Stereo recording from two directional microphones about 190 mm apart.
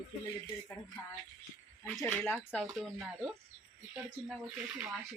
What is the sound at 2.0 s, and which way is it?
Speech, 10° left (ahead or behind).